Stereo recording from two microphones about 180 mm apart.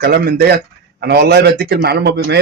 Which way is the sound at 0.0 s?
60° right (ahead or behind).